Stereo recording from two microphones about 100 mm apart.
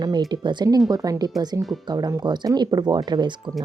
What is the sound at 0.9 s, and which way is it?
A woman's voice, 40° right (ahead or behind).